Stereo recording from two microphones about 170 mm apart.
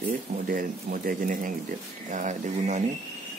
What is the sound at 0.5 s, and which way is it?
Speech, 55° right (ahead or behind).